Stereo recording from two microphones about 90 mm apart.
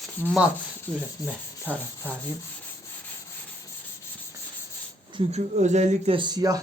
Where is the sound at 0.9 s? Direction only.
10° left (ahead or behind).